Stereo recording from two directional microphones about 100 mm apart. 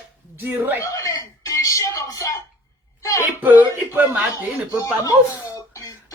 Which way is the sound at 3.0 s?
30° left (ahead or behind).